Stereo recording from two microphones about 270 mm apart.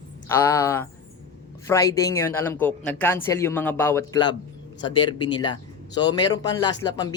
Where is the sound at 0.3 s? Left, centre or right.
Centre.